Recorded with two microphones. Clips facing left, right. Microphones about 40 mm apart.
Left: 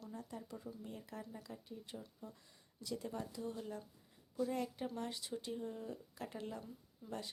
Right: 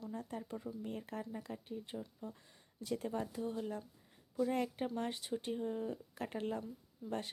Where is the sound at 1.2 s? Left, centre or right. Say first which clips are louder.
Right 6 dB; right.